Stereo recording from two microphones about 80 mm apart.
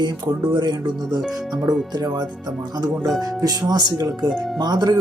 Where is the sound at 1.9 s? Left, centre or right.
Right.